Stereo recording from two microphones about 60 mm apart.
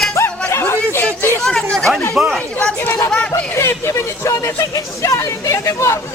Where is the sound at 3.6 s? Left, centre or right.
Left.